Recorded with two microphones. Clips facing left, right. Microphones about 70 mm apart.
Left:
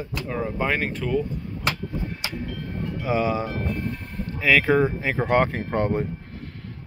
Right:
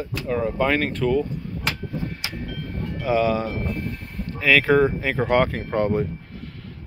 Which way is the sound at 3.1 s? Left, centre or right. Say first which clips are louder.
Right 3 dB; left.